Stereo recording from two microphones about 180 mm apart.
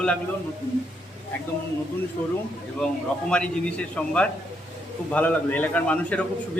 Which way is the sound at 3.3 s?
5° left (ahead or behind).